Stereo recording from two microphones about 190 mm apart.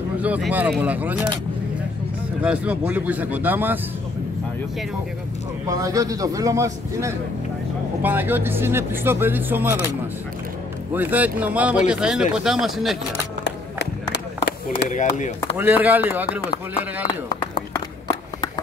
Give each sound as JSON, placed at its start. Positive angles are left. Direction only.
{"t": 0.2, "sound": "speech", "side_deg": -5}
{"t": 2.4, "sound": "speech", "side_deg": -5}
{"t": 5.7, "sound": "speech", "side_deg": -15}
{"t": 10.9, "sound": "speech", "side_deg": -10}
{"t": 14.1, "sound": "a sound", "side_deg": 60}
{"t": 14.9, "sound": "speech", "side_deg": 40}
{"t": 15.5, "sound": "speech", "side_deg": -10}